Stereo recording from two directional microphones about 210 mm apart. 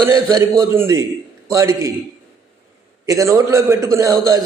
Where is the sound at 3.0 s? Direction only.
15° right (ahead or behind).